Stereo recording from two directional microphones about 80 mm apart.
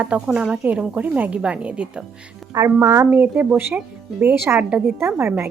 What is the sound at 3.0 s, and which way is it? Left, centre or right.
Speech, right.